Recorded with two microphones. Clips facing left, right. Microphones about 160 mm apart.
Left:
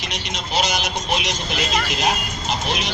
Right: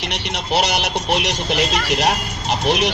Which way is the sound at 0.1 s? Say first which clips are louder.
Right 4 dB; 65° right (ahead or behind).